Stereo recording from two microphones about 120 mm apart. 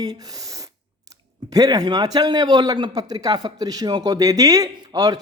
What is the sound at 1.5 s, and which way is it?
Speech, 30° right (ahead or behind).